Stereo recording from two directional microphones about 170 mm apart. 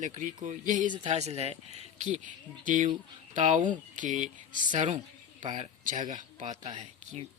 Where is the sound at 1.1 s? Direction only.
40° right (ahead or behind).